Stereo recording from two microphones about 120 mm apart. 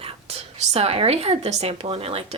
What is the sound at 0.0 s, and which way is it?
Speech, 55° right (ahead or behind).